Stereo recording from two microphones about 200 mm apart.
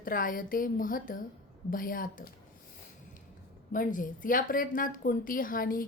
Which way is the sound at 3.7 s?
40° left (ahead or behind).